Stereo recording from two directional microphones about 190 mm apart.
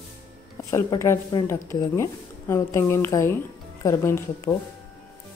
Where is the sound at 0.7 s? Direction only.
15° left (ahead or behind).